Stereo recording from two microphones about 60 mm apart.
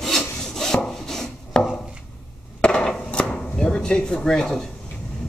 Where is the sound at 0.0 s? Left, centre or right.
Centre.